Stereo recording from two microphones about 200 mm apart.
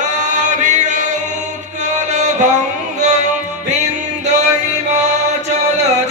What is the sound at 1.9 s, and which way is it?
Music, 35° right (ahead or behind).